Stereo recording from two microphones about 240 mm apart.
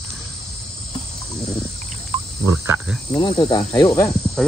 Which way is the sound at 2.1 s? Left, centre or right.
Right.